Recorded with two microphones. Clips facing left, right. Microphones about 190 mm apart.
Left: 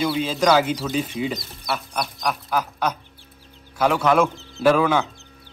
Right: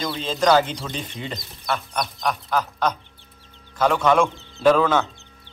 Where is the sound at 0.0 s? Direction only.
10° left (ahead or behind).